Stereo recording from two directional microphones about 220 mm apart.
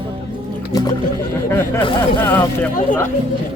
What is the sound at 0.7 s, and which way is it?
Speech, 15° left (ahead or behind).